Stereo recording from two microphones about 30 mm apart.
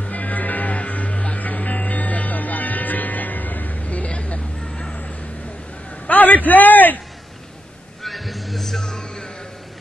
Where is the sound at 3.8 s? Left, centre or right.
Left.